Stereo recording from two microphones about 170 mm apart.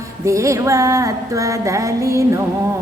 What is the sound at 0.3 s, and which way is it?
Female singing, 15° right (ahead or behind).